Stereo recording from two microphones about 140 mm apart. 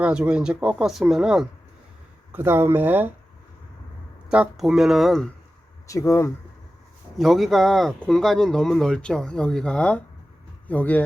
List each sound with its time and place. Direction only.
0.0 s speech: 10° right (ahead or behind)
2.3 s speech: 15° right (ahead or behind)
4.3 s speech: 5° right (ahead or behind)
5.9 s speech: 20° left (ahead or behind)
7.2 s speech: centre (ahead or behind)